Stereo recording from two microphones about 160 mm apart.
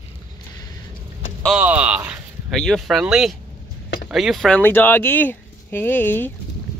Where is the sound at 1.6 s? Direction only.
10° right (ahead or behind).